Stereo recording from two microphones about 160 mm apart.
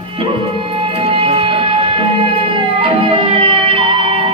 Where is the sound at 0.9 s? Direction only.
35° right (ahead or behind).